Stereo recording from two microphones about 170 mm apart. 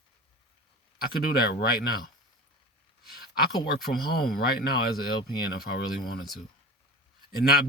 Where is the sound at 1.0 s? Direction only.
65° left (ahead or behind).